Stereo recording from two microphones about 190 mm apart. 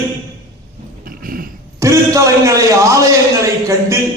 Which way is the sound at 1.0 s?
50° right (ahead or behind).